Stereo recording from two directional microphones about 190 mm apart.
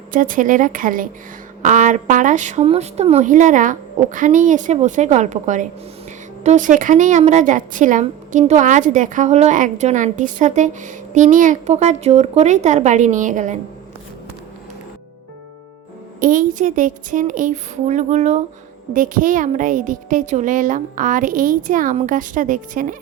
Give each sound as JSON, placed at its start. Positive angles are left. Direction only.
{"t": 0.1, "sound": "a woman's voice", "side_deg": -45}
{"t": 16.2, "sound": "speech", "side_deg": -45}